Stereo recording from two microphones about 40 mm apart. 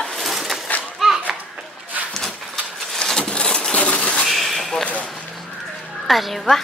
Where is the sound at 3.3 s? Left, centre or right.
Left.